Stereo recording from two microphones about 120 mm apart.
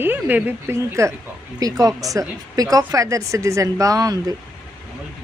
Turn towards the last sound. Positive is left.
turn(degrees=-30)  # may be behind; listen again after turning